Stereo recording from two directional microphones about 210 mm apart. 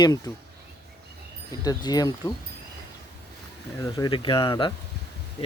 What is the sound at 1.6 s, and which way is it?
Speech, 20° left (ahead or behind).